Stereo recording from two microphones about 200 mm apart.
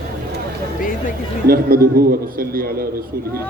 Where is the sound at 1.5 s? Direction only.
50° right (ahead or behind).